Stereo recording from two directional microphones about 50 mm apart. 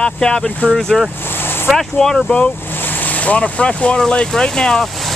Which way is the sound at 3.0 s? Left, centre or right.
Left.